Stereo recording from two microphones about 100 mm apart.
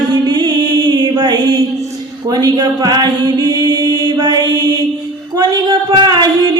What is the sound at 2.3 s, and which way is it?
Mantra, 40° right (ahead or behind).